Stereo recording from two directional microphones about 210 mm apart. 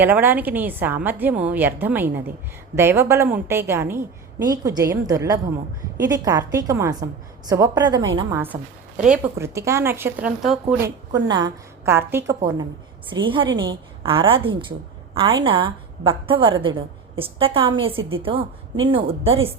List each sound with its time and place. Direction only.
0.0 s a woman's voice: 10° right (ahead or behind)
9.0 s a woman's voice: 5° right (ahead or behind)
11.3 s a woman's voice: 20° right (ahead or behind)